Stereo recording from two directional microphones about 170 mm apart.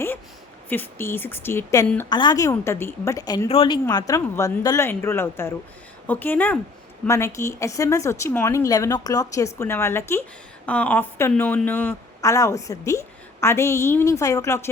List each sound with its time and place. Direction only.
0.7 s a woman's voice: 15° left (ahead or behind)
3.5 s speech: 35° left (ahead or behind)
3.8 s speech: 20° left (ahead or behind)